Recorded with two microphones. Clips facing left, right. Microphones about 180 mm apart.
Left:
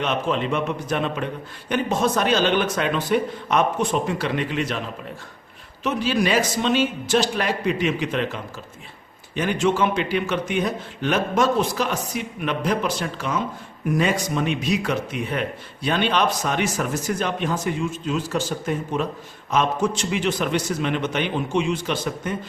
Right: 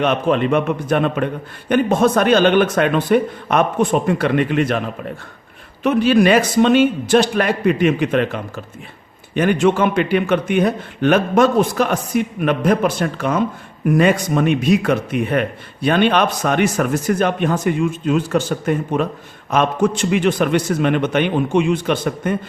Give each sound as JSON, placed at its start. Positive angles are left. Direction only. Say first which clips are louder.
{"t": 0.0, "sound": "speech", "louder": "right 7 dB", "side_deg": -60}
{"t": 5.8, "sound": "speech", "louder": "right 8 dB", "side_deg": -60}